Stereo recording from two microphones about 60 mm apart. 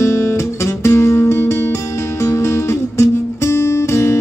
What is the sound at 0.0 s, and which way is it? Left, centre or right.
Music, left.